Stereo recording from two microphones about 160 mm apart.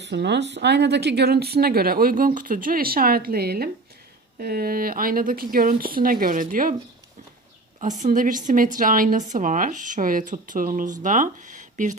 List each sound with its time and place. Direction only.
0.0 s speech: 90° right; by 6.7 s 60° right (ahead or behind)
7.8 s a woman's voice: 50° right (ahead or behind)